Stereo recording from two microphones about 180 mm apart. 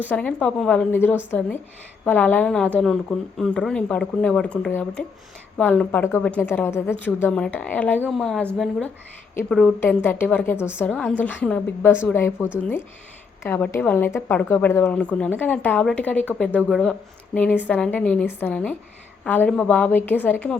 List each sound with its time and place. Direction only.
0.0 s a woman's voice: 10° left (ahead or behind)